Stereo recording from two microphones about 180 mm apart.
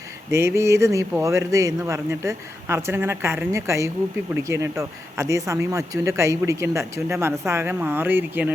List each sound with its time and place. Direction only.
0.3 s speech: 15° right (ahead or behind)